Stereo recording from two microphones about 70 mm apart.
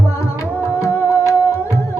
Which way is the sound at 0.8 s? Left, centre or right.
Left.